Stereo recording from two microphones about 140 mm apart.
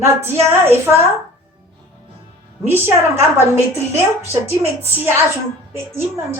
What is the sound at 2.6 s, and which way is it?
A woman's voice, 15° right (ahead or behind).